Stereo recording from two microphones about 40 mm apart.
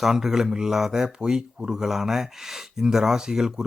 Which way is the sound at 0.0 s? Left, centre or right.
Centre.